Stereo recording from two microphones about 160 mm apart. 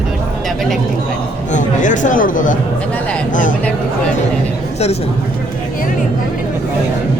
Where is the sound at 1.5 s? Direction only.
50° left (ahead or behind).